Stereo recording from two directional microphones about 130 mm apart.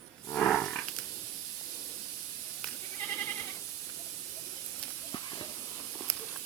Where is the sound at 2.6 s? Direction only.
5° left (ahead or behind).